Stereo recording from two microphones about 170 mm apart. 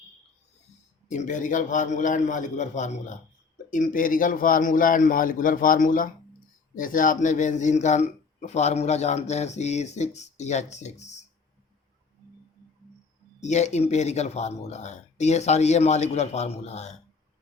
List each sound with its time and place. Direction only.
1.0 s a man's voice: 45° left (ahead or behind)
13.4 s a man's voice: 40° left (ahead or behind)